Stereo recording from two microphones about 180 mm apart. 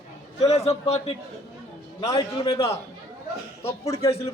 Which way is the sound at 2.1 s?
30° left (ahead or behind).